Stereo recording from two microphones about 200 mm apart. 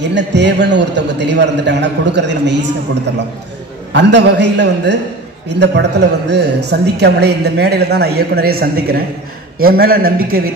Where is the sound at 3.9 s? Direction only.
60° right (ahead or behind).